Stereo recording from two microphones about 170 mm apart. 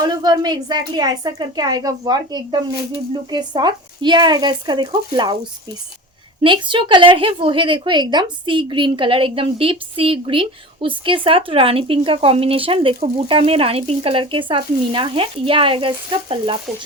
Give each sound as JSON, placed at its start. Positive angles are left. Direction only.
{"t": 0.0, "sound": "a woman's voice", "side_deg": -25}
{"t": 6.4, "sound": "a woman's voice", "side_deg": -30}